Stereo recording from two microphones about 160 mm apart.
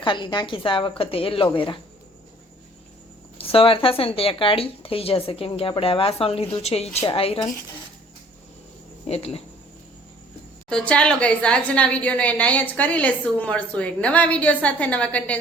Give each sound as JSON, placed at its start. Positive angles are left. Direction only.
{"t": 0.0, "sound": "speech", "side_deg": 30}
{"t": 3.3, "sound": "speech", "side_deg": 35}
{"t": 9.0, "sound": "speech", "side_deg": 40}
{"t": 10.7, "sound": "a woman's voice", "side_deg": 5}